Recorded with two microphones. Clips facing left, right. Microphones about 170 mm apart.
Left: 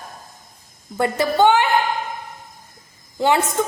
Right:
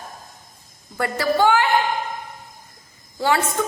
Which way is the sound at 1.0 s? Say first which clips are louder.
Left 3 dB; 20° left (ahead or behind).